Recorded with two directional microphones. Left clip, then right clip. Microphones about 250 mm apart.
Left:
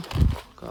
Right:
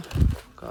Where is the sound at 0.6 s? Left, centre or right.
Centre.